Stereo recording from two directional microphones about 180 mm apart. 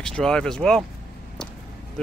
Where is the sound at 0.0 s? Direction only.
5° left (ahead or behind).